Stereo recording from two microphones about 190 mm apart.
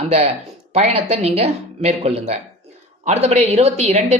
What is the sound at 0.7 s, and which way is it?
Speech, 35° right (ahead or behind).